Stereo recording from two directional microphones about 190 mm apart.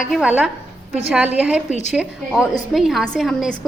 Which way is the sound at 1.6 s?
40° left (ahead or behind).